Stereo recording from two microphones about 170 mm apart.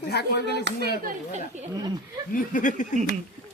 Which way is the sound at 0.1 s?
75° left (ahead or behind).